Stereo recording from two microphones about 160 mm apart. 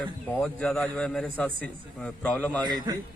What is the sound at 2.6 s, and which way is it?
Speech, 25° right (ahead or behind).